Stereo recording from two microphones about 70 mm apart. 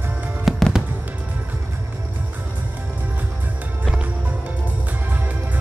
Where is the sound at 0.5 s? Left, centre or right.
Centre.